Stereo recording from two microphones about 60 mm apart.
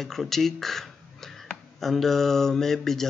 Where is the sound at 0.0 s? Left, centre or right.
Centre.